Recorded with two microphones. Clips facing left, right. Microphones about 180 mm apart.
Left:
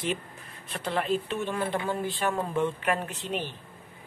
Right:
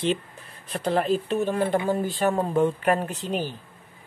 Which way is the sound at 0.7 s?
40° right (ahead or behind).